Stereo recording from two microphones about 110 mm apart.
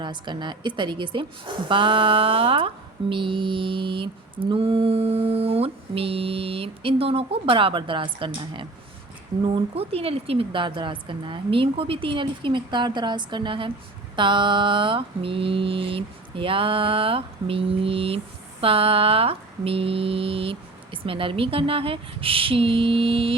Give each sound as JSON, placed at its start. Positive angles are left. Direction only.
{"t": 0.0, "sound": "a woman's voice", "side_deg": -45}
{"t": 18.6, "sound": "mantra", "side_deg": -55}